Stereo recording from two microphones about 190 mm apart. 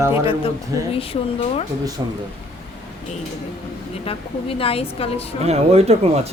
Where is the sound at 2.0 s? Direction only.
20° right (ahead or behind).